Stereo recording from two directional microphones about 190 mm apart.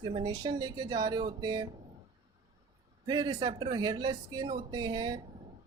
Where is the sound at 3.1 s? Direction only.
20° right (ahead or behind).